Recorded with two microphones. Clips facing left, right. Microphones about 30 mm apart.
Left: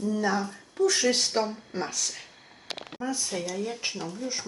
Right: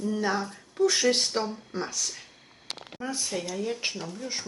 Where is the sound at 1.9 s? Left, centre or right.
Left.